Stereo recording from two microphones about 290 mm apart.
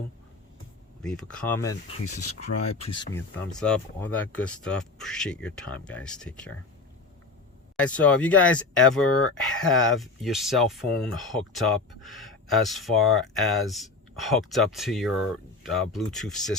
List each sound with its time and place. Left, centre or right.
1.0 s speech: centre
2.6 s speech: left
3.1 s speech: centre
7.8 s speech: centre